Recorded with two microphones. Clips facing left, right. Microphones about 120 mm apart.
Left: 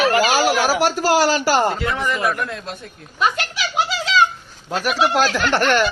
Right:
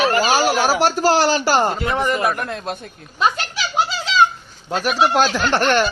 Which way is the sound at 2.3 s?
55° right (ahead or behind).